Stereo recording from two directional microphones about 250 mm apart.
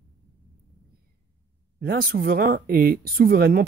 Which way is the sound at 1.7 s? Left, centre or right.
Right.